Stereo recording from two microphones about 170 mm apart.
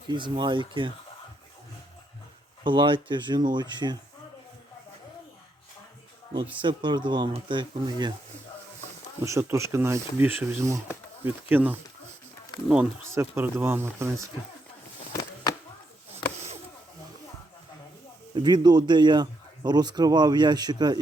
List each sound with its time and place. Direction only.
0.1 s speech: 25° right (ahead or behind)
2.6 s speech: 30° right (ahead or behind)
6.6 s speech: 25° right (ahead or behind)
9.2 s speech: 15° right (ahead or behind)
18.3 s speech: 25° right (ahead or behind)